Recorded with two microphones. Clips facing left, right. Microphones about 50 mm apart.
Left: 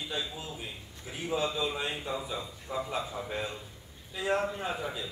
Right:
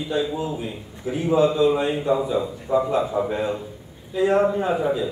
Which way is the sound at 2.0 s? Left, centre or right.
Right.